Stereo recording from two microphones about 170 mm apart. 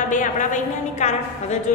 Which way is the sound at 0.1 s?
50° left (ahead or behind).